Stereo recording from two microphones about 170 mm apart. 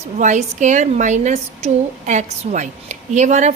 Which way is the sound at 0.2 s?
45° right (ahead or behind).